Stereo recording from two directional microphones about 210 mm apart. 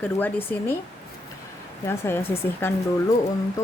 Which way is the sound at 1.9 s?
10° left (ahead or behind).